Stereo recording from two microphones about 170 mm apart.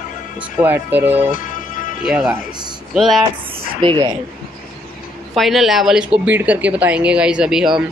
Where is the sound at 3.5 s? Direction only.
30° right (ahead or behind).